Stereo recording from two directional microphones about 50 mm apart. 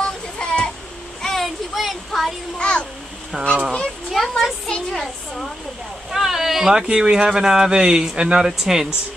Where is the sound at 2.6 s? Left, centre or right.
Left.